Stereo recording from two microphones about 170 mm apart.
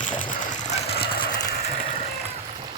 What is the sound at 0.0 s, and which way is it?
Sewing machine, 50° left (ahead or behind).